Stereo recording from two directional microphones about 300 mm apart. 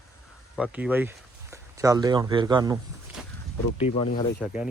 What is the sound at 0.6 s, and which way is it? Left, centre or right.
Speech, centre.